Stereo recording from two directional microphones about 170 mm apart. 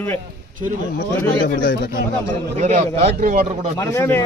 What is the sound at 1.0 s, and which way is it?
Speech, 60° left (ahead or behind).